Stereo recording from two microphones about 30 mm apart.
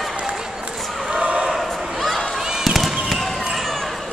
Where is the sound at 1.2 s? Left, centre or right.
Right.